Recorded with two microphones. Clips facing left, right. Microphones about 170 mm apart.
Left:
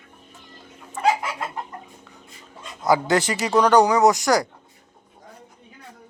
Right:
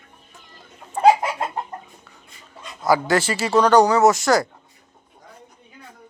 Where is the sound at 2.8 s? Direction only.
20° left (ahead or behind).